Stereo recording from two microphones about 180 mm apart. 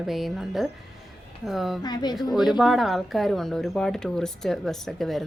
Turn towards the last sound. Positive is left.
turn(degrees=0)  # may be behind; listen again after turning